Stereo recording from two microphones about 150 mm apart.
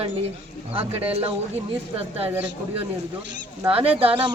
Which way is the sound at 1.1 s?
40° right (ahead or behind).